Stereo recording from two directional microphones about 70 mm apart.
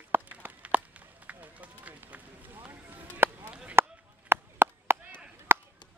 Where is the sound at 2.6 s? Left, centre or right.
Right.